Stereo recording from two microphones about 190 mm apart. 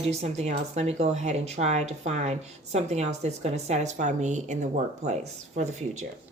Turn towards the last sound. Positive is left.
turn(degrees=-40)  # may be behind; listen again after turning